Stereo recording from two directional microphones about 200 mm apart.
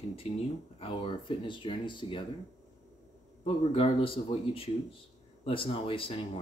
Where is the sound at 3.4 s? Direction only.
25° left (ahead or behind).